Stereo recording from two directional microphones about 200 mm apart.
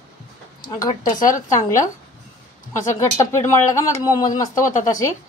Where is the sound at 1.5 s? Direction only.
15° left (ahead or behind).